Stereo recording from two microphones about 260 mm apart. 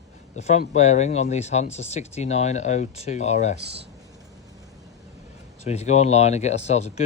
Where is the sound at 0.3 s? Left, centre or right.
Left.